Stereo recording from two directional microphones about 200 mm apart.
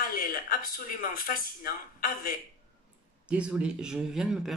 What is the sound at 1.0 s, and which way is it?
Speech, 45° left (ahead or behind).